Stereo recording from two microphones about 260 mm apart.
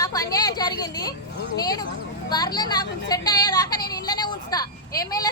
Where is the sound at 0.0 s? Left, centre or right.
Centre.